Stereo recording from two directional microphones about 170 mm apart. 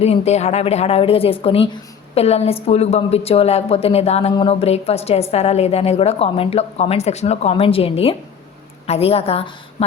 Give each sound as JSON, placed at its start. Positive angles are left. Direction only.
{"t": 0.0, "sound": "speech", "side_deg": 40}